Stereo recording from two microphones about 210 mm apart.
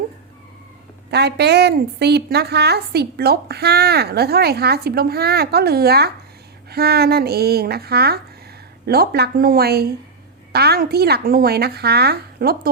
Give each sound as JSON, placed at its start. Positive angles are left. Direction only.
{"t": 1.1, "sound": "a woman's voice", "side_deg": -50}